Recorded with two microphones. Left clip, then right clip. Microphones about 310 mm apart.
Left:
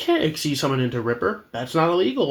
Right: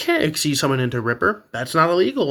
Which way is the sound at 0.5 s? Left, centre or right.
Right.